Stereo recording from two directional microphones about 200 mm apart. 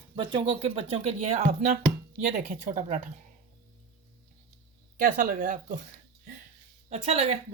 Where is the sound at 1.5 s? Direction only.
40° right (ahead or behind).